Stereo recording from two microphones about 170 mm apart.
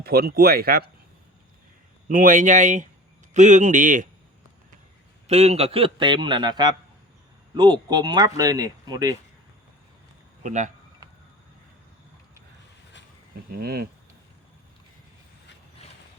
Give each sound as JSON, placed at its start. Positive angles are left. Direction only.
{"t": 0.0, "sound": "speech", "side_deg": -65}
{"t": 2.0, "sound": "speech", "side_deg": -55}
{"t": 5.3, "sound": "speech", "side_deg": -40}
{"t": 10.4, "sound": "speech", "side_deg": -45}
{"t": 13.6, "sound": "speech", "side_deg": -65}